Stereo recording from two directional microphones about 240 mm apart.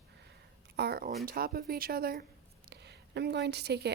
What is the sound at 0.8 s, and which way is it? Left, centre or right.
A woman's voice, right.